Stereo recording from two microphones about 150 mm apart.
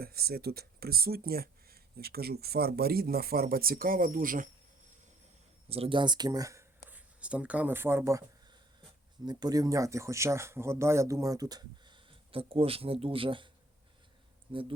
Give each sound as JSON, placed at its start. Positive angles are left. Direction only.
{"t": 0.0, "sound": "speech", "side_deg": -90}
{"t": 5.6, "sound": "speech", "side_deg": -40}
{"t": 6.8, "sound": "speech", "side_deg": -10}
{"t": 9.2, "sound": "speech", "side_deg": -25}
{"t": 12.3, "sound": "speech", "side_deg": -40}
{"t": 14.5, "sound": "speech", "side_deg": -35}